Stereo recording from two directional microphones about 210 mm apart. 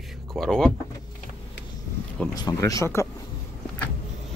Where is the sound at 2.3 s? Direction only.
15° left (ahead or behind).